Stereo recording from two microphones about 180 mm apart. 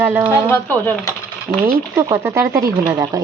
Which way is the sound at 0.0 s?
10° right (ahead or behind).